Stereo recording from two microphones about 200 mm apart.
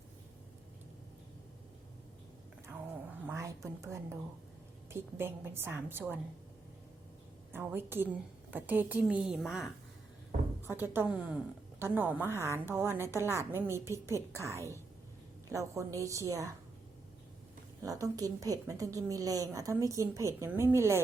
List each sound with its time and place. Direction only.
3.2 s a woman's voice: 15° right (ahead or behind)
7.5 s a woman's voice: 10° right (ahead or behind)
10.7 s a woman's voice: 10° right (ahead or behind)
17.8 s a woman's voice: 15° right (ahead or behind)